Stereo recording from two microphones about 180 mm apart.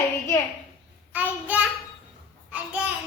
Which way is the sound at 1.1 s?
10° right (ahead or behind).